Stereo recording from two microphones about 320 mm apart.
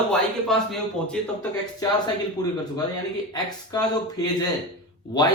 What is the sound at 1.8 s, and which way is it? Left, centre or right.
Speech, centre.